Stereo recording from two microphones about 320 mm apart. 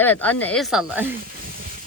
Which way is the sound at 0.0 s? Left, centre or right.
Centre.